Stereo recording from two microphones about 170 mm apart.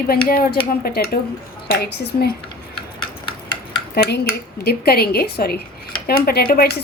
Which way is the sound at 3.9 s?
70° left (ahead or behind).